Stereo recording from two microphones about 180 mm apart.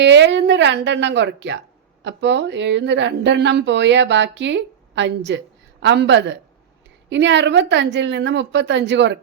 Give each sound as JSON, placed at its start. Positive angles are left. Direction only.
{"t": 0.0, "sound": "a woman's voice", "side_deg": -80}